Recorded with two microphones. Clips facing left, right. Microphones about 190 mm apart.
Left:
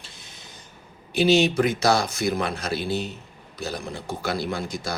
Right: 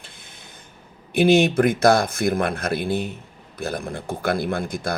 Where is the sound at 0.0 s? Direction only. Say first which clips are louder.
Right 1 dB; 55° right (ahead or behind).